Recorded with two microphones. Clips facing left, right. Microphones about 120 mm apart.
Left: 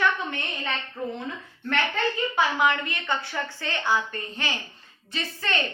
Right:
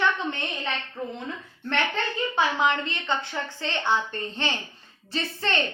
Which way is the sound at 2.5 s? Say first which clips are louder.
Even; 25° right (ahead or behind).